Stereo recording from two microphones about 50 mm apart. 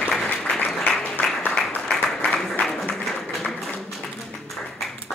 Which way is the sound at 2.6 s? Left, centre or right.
Centre.